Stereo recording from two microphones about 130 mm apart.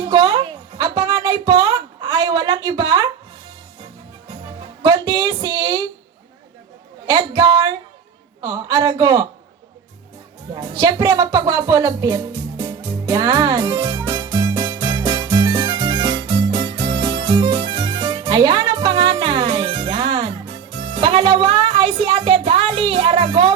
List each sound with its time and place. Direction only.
0.0 s a sound: 30° right (ahead or behind)
4.3 s music: 30° right (ahead or behind)
7.1 s a man's voice: 25° right (ahead or behind)
10.5 s music: 25° right (ahead or behind)
22.0 s a sound: 35° right (ahead or behind)
22.8 s music: 40° right (ahead or behind)